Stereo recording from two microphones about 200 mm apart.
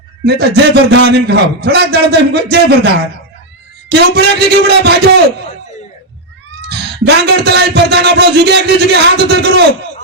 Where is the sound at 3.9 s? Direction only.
55° right (ahead or behind).